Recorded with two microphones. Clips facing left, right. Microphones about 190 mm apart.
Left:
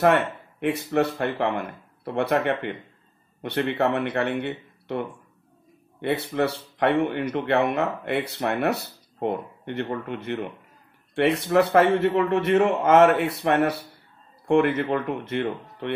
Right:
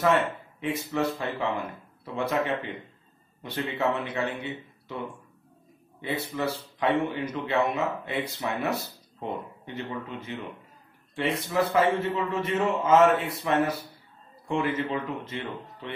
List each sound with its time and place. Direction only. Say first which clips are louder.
0.6 s speech: left 6 dB; 65° left (ahead or behind)
3.7 s speech: left 2 dB; 65° left (ahead or behind)